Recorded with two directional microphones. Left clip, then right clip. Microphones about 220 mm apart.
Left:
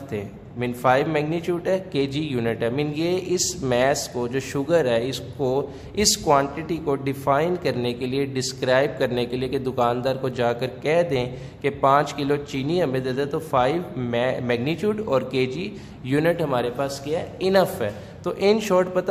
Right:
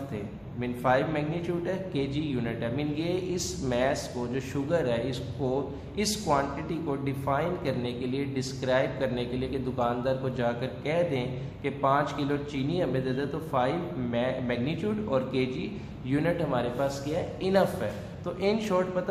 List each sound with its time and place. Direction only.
0.6 s a man's voice: 45° left (ahead or behind)